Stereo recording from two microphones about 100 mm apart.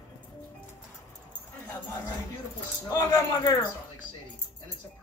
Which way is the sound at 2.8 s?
35° left (ahead or behind).